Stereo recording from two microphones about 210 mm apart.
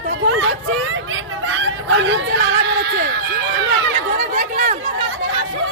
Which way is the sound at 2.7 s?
50° right (ahead or behind).